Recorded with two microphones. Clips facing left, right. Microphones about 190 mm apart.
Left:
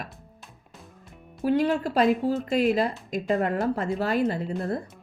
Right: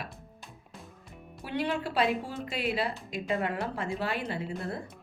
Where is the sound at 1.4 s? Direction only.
40° left (ahead or behind).